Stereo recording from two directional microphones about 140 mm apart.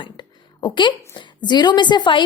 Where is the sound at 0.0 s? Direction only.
35° left (ahead or behind).